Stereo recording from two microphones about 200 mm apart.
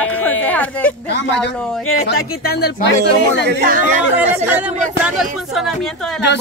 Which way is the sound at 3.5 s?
50° right (ahead or behind).